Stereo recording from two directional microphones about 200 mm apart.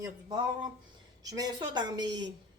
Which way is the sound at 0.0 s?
20° right (ahead or behind).